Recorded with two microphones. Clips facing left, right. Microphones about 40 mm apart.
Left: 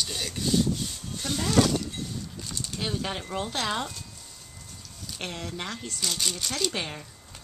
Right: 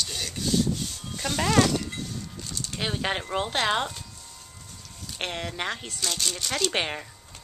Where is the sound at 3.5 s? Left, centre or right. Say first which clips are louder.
Right 5 dB; right.